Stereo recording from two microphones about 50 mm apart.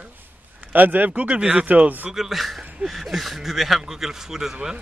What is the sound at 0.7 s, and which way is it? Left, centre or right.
Speech, right.